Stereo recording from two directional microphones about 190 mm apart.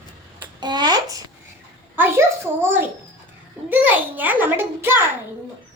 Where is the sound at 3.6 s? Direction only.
10° right (ahead or behind).